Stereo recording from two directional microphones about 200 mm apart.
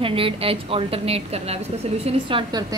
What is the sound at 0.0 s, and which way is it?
A woman's voice, 25° right (ahead or behind).